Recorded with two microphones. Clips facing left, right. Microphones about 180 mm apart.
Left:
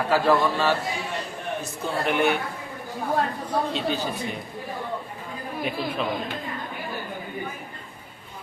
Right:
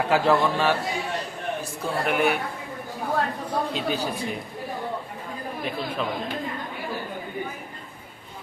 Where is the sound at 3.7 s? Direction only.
10° right (ahead or behind).